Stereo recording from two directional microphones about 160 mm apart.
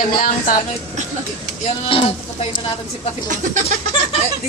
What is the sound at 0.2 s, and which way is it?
Speech, 60° left (ahead or behind).